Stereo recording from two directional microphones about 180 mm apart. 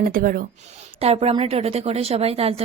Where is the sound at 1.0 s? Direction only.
35° right (ahead or behind).